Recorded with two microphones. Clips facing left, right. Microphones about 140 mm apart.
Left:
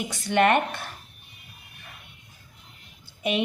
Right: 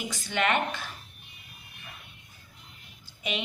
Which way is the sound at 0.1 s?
60° left (ahead or behind).